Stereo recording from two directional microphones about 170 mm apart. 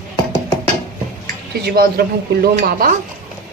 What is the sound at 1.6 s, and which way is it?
Speech, 65° right (ahead or behind).